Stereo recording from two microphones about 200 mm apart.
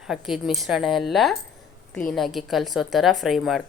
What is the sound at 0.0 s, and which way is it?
A woman's voice, centre (ahead or behind).